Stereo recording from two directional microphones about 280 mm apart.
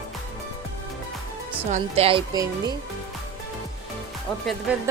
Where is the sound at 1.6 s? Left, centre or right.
Right.